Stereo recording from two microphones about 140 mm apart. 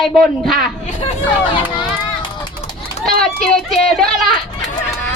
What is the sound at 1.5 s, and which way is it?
Speech, 35° left (ahead or behind).